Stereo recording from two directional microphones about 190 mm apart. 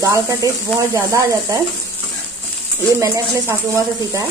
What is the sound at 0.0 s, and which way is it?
Speech, 15° right (ahead or behind).